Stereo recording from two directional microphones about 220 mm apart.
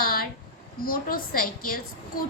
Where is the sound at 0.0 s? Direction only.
40° left (ahead or behind).